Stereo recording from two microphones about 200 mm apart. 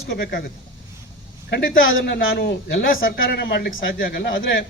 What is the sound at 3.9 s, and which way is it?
Speech, 50° left (ahead or behind).